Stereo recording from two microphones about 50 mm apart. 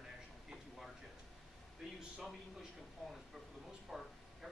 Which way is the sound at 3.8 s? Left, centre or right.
Centre.